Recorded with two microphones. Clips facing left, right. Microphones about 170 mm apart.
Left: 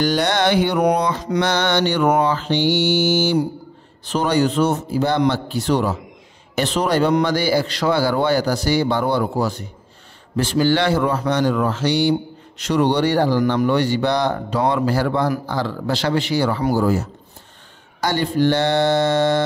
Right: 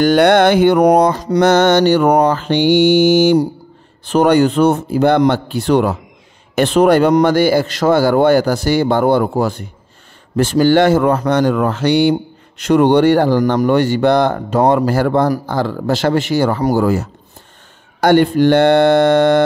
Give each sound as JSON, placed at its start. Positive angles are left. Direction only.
{"t": 0.0, "sound": "a man's voice", "side_deg": -55}
{"t": 16.8, "sound": "speech", "side_deg": -70}
{"t": 18.0, "sound": "a man's voice", "side_deg": -55}